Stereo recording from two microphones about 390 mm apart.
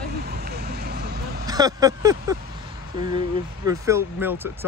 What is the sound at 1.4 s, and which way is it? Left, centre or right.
Speech, centre.